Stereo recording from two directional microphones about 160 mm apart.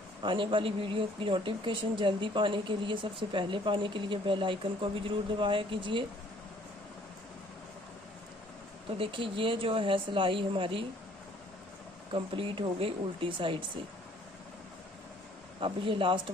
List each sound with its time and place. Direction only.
0.2 s a man's voice: 30° right (ahead or behind)
8.9 s a man's voice: 35° right (ahead or behind)
12.1 s a man's voice: 35° right (ahead or behind)
15.6 s a man's voice: 35° right (ahead or behind)